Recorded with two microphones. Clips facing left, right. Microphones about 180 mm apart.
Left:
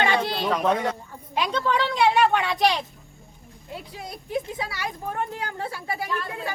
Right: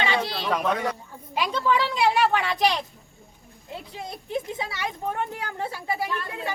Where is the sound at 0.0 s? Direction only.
50° left (ahead or behind).